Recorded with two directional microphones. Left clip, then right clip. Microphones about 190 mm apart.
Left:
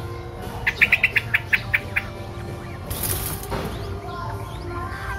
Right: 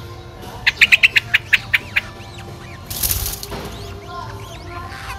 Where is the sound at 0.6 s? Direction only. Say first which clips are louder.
Right 6 dB; 40° right (ahead or behind).